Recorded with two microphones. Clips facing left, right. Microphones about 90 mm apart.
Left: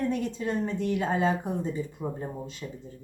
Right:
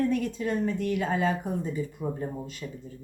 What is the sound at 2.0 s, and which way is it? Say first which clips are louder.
Speech: right 2 dB; 15° left (ahead or behind).